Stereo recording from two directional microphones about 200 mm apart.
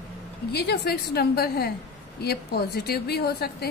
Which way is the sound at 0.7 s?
50° left (ahead or behind).